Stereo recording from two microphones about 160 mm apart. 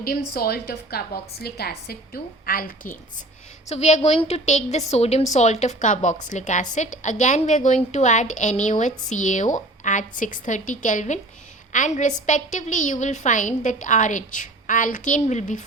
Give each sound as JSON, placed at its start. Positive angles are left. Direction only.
{"t": 0.0, "sound": "a woman's voice", "side_deg": 70}
{"t": 1.9, "sound": "a woman's voice", "side_deg": 65}
{"t": 3.7, "sound": "a woman's voice", "side_deg": 45}